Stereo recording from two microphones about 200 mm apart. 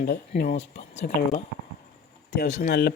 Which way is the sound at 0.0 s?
50° left (ahead or behind).